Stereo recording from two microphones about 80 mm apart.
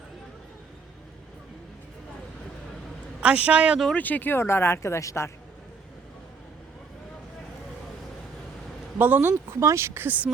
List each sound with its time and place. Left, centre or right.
3.2 s speech: centre
3.9 s speech: left
9.0 s speech: right
9.5 s speech: right